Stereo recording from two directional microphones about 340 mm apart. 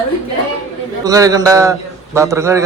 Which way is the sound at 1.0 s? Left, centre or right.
Centre.